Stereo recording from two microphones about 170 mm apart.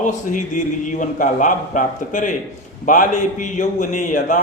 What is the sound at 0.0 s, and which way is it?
A man's voice, 50° left (ahead or behind).